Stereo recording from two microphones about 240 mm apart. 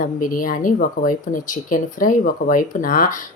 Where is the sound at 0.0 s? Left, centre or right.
Left.